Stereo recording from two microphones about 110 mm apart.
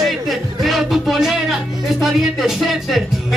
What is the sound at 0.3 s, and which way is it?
Music, centre (ahead or behind).